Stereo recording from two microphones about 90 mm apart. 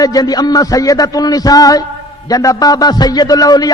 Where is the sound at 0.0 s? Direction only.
45° left (ahead or behind).